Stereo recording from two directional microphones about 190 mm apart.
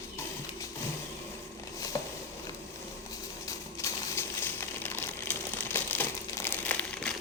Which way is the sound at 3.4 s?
15° left (ahead or behind).